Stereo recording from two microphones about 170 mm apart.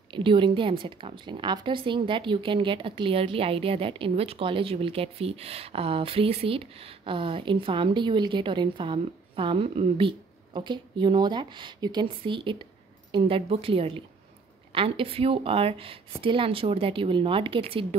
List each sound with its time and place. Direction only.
0.1 s a woman's voice: 30° right (ahead or behind)